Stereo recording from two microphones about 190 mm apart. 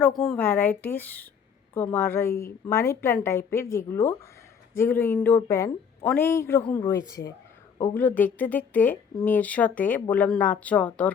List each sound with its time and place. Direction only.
0.2 s speech: 5° left (ahead or behind)